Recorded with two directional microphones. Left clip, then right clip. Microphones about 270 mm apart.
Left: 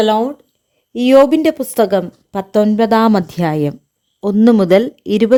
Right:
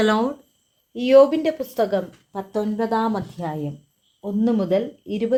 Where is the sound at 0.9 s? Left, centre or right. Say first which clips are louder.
Left 5 dB; left.